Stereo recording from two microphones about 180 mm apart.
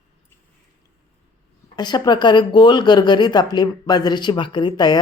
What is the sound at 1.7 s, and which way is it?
Speech, 25° left (ahead or behind).